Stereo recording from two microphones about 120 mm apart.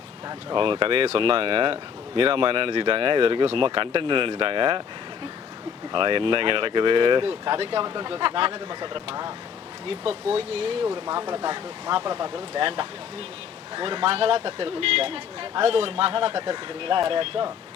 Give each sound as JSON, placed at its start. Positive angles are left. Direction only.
{"t": 0.3, "sound": "speech", "side_deg": -45}
{"t": 5.9, "sound": "speech", "side_deg": -45}
{"t": 10.9, "sound": "speech", "side_deg": -35}